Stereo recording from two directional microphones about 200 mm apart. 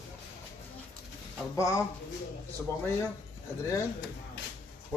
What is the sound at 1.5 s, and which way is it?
Speech, 15° left (ahead or behind).